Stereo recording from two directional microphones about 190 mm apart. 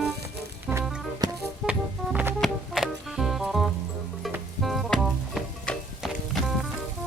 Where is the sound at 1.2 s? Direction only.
20° right (ahead or behind).